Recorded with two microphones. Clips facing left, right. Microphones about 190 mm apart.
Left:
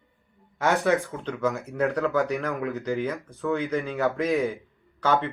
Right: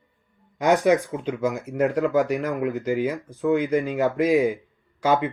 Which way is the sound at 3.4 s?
15° right (ahead or behind).